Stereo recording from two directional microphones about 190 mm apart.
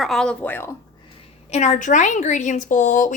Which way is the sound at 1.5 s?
40° left (ahead or behind).